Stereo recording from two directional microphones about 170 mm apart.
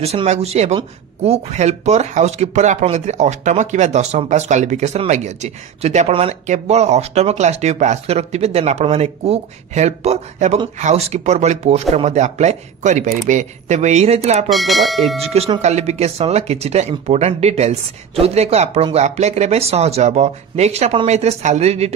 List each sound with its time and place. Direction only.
0.0 s speech: 35° right (ahead or behind)
14.5 s speech: centre (ahead or behind)
15.2 s speech: 35° right (ahead or behind)